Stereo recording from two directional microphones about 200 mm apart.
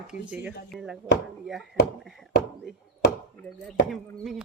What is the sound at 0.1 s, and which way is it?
Speech, 5° right (ahead or behind).